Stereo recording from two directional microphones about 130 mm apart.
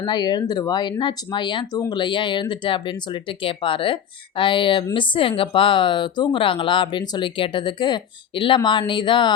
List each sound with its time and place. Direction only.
0.0 s speech: 35° left (ahead or behind)